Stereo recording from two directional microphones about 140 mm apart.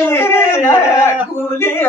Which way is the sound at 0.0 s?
15° left (ahead or behind).